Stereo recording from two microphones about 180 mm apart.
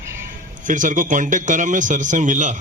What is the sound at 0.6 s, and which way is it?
Speech, 45° right (ahead or behind).